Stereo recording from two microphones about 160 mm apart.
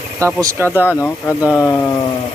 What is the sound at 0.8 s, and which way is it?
Speech, 15° left (ahead or behind).